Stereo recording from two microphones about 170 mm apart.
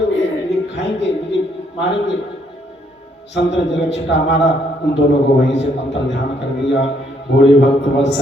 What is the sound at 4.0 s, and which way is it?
A man's voice, 90° left.